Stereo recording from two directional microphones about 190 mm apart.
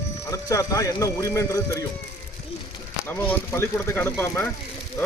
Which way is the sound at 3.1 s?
10° left (ahead or behind).